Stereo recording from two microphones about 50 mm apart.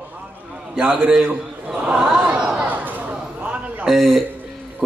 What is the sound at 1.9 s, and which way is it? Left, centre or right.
Chatter, centre.